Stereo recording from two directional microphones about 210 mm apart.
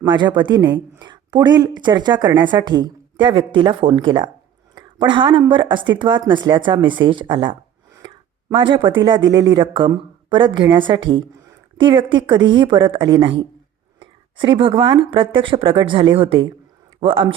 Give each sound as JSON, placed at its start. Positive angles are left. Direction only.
{"t": 0.0, "sound": "a woman's voice", "side_deg": -20}
{"t": 7.9, "sound": "a sound", "side_deg": -20}
{"t": 9.0, "sound": "a woman's voice", "side_deg": -20}